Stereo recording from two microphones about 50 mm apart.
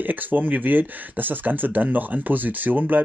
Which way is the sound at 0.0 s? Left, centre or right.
Right.